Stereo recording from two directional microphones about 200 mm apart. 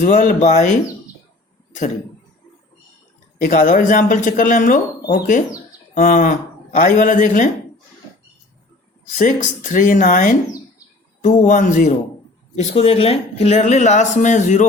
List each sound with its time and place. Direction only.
0.0 s speech: 40° left (ahead or behind)
3.4 s a man's voice: 40° left (ahead or behind)
9.1 s speech: 40° left (ahead or behind)
11.4 s speech: 40° left (ahead or behind)